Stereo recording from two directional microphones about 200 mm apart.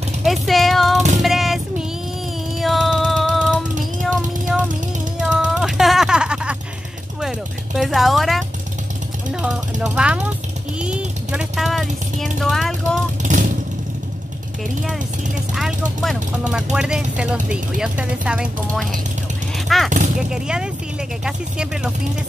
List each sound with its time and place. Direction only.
0.2 s a sound: centre (ahead or behind)
1.2 s music: centre (ahead or behind)
4.0 s a sound: centre (ahead or behind)
7.2 s speech: centre (ahead or behind)
13.2 s vehicle: 40° right (ahead or behind)
15.5 s speech: centre (ahead or behind)